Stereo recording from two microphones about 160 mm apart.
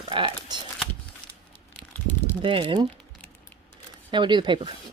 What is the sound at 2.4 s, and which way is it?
Speech, 30° right (ahead or behind).